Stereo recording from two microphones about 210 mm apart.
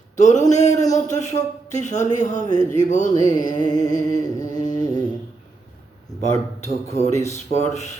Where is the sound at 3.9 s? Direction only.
35° left (ahead or behind).